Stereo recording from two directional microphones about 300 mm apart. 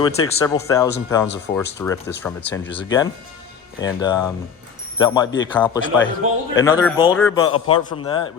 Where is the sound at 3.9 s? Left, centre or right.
Centre.